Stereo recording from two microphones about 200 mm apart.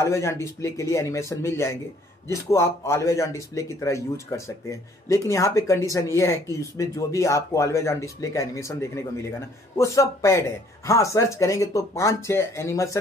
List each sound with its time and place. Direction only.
0.0 s speech: 15° left (ahead or behind)